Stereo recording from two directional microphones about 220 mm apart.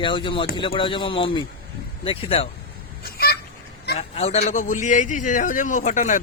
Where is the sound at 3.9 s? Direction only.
30° left (ahead or behind).